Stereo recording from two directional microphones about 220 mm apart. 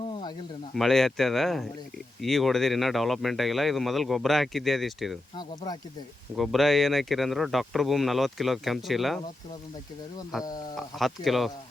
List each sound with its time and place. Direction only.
0.0 s a sound: 20° left (ahead or behind)
0.7 s speech: centre (ahead or behind)
6.3 s speech: centre (ahead or behind)
10.3 s speech: centre (ahead or behind)